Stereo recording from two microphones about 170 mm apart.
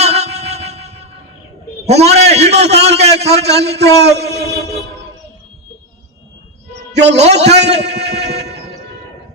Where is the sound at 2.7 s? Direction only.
80° right.